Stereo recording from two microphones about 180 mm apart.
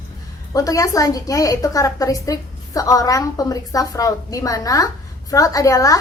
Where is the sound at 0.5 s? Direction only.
20° left (ahead or behind).